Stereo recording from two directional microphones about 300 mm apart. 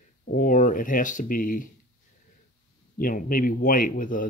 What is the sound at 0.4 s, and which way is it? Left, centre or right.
Speech, left.